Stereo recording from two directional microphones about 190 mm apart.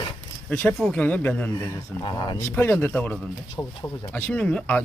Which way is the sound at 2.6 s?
10° left (ahead or behind).